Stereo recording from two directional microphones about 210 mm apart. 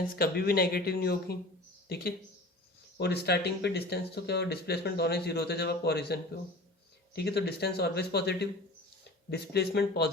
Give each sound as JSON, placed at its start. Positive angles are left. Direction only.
{"t": 0.2, "sound": "speech", "side_deg": 45}
{"t": 3.0, "sound": "speech", "side_deg": 50}